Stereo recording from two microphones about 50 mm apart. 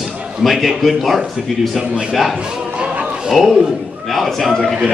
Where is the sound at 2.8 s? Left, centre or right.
Centre.